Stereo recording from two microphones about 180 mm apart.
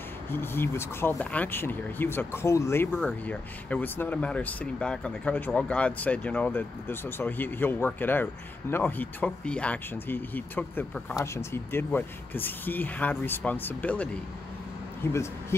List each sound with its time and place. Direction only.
0.3 s speech: 10° left (ahead or behind)
15.0 s speech: 15° left (ahead or behind)